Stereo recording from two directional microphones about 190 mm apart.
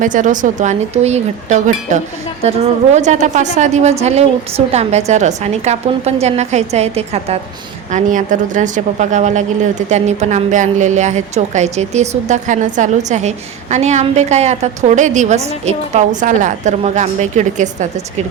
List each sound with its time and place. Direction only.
0.0 s a woman's voice: 45° right (ahead or behind)